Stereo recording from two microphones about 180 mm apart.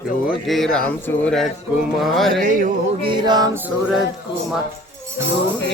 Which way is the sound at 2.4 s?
50° right (ahead or behind).